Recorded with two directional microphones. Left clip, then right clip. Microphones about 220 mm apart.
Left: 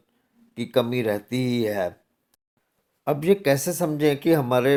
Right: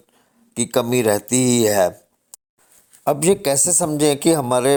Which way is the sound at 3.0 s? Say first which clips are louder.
Right 4 dB; 30° right (ahead or behind).